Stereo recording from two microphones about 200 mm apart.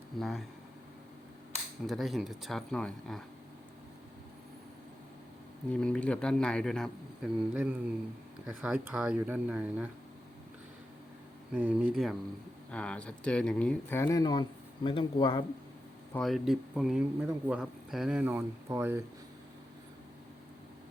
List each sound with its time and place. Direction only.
0.2 s a man's voice: centre (ahead or behind)
1.9 s a man's voice: centre (ahead or behind)
5.7 s a man's voice: 5° left (ahead or behind)
11.5 s a man's voice: 5° right (ahead or behind); by 15.4 s 25° left (ahead or behind)
16.1 s a man's voice: centre (ahead or behind)